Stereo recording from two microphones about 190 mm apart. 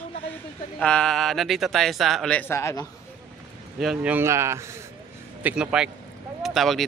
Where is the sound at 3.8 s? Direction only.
5° right (ahead or behind).